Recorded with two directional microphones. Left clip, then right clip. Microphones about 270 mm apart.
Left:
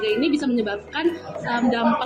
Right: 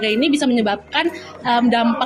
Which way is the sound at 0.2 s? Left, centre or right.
Right.